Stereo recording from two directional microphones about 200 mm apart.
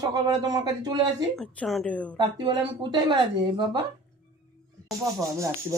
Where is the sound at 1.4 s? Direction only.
Centre (ahead or behind).